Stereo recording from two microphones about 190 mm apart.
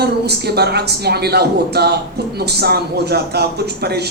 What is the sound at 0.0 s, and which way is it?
Speech, 55° right (ahead or behind).